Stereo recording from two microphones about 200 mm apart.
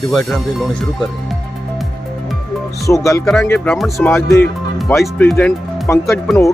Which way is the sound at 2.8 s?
15° left (ahead or behind).